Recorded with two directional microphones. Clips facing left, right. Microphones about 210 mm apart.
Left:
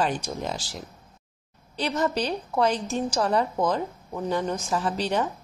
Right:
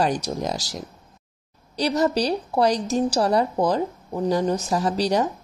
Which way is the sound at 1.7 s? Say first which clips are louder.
Right 5 dB; 35° right (ahead or behind).